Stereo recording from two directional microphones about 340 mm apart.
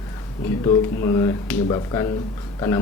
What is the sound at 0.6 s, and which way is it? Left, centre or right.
Speech, centre.